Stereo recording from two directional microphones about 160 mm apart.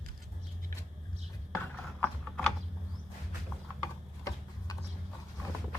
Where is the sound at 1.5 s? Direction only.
10° left (ahead or behind).